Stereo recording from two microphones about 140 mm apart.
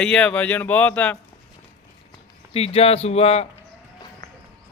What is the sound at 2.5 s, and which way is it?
Speech, 45° left (ahead or behind).